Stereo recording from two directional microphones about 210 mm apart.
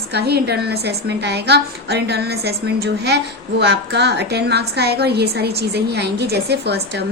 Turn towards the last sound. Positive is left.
turn(degrees=-50)  # may be behind; listen again after turning